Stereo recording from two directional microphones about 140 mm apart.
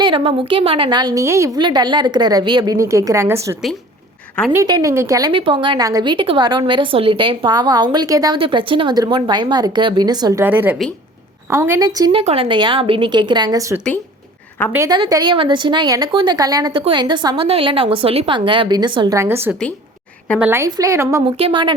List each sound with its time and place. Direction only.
0.0 s a woman's voice: 35° right (ahead or behind); by 1.5 s 20° right (ahead or behind)
1.5 s a woman's voice: 30° right (ahead or behind)
5.3 s a woman's voice: 35° right (ahead or behind)
10.4 s a woman's voice: 15° right (ahead or behind)
12.1 s a woman's voice: 45° right (ahead or behind); by 13.7 s 25° right (ahead or behind)
14.8 s a woman's voice: 30° right (ahead or behind)
19.1 s a woman's voice: 20° right (ahead or behind)
21.3 s a woman's voice: 40° right (ahead or behind)